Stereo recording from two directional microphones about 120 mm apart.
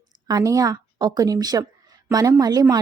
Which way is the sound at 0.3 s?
30° right (ahead or behind).